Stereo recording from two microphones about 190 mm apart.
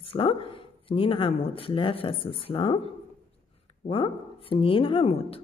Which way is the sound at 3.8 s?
30° left (ahead or behind).